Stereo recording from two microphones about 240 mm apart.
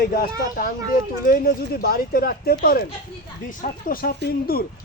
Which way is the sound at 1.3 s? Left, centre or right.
Left.